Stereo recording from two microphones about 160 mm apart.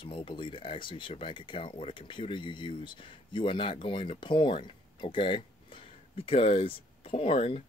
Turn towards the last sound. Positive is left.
turn(degrees=35)  # may be behind; listen again after turning